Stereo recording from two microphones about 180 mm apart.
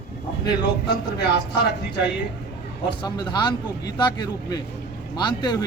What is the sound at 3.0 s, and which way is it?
A man's voice, 25° left (ahead or behind).